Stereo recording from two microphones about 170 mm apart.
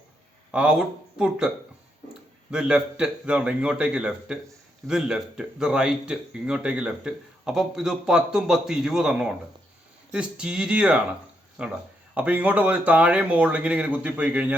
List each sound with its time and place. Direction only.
0.5 s speech: 5° right (ahead or behind)